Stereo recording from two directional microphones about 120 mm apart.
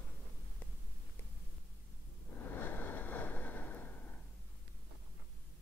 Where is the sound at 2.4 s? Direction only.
15° left (ahead or behind).